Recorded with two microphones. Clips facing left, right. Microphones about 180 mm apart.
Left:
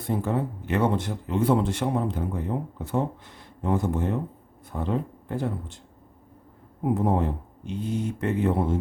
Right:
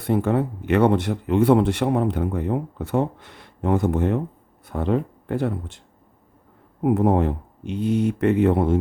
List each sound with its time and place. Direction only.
0.0 s speech: 70° right (ahead or behind)
6.8 s speech: 70° right (ahead or behind)